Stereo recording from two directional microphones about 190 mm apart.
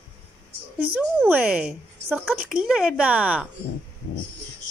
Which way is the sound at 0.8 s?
10° right (ahead or behind).